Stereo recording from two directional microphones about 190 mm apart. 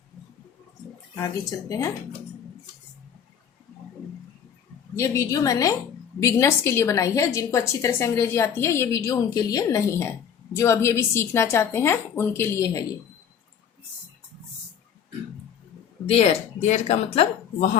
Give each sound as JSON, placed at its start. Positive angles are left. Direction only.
{"t": 1.1, "sound": "a woman's voice", "side_deg": 15}
{"t": 4.9, "sound": "a woman's voice", "side_deg": 15}
{"t": 16.0, "sound": "speech", "side_deg": 35}